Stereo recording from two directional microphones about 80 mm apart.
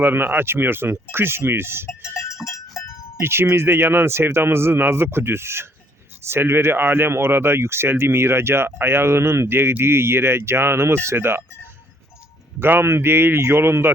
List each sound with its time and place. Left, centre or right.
0.0 s a man's voice: right
1.9 s goat: left
3.2 s speech: right
12.5 s a man's voice: right